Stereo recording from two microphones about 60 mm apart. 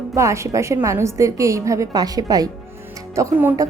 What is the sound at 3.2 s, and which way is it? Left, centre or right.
Speech, right.